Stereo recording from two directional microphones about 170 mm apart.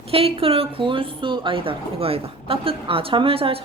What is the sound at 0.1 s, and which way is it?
A woman's voice, 35° right (ahead or behind).